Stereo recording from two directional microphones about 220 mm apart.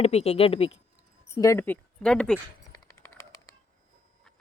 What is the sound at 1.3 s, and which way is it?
Speech, 15° left (ahead or behind).